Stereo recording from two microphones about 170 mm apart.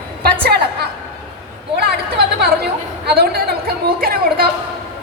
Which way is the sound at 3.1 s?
65° right (ahead or behind).